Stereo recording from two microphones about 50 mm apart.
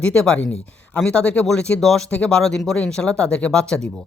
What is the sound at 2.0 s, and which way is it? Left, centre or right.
Speech, left.